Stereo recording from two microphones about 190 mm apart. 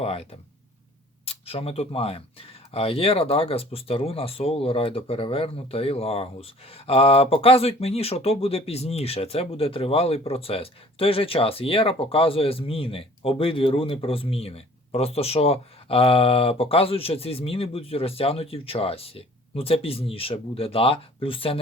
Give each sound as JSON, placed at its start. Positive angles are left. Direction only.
{"t": 0.0, "sound": "speech", "side_deg": 30}